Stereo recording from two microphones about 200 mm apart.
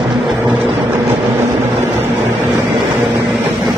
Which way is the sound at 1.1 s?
10° right (ahead or behind).